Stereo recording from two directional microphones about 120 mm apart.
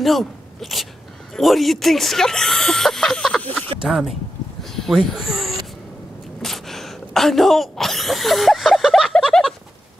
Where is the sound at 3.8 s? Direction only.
Centre (ahead or behind).